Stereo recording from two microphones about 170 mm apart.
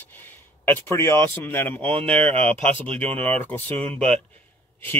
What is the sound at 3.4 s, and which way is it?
Speech, 10° left (ahead or behind).